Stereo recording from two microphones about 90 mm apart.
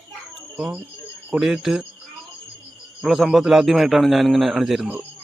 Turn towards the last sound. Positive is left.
turn(degrees=0)  # may be behind; listen again after turning